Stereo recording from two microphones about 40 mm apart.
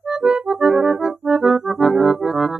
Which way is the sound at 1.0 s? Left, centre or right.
Centre.